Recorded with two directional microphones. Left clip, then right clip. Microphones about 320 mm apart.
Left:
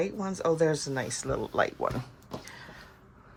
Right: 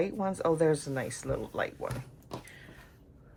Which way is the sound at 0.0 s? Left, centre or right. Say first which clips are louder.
Even; centre.